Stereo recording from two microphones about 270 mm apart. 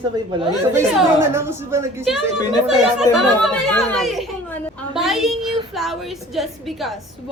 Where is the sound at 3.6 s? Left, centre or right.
Centre.